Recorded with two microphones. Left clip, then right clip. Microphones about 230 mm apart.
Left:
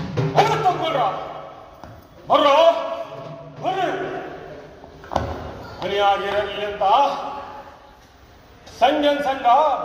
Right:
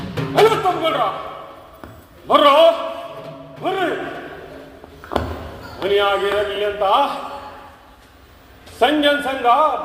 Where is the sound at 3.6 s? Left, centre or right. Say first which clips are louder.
Right 1 dB; left.